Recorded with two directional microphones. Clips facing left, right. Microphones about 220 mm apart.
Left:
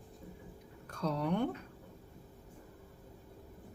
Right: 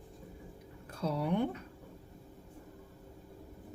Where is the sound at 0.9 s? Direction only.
5° right (ahead or behind).